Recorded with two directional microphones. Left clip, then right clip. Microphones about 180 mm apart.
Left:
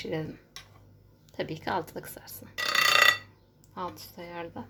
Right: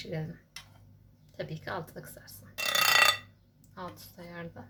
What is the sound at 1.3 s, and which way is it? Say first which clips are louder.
Speech: left 6 dB; 35° left (ahead or behind).